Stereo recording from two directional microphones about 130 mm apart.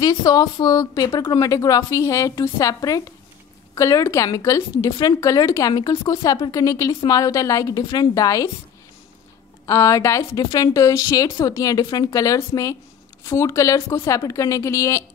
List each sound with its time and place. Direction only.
0.0 s a woman's voice: 30° left (ahead or behind)
9.7 s a woman's voice: 25° left (ahead or behind)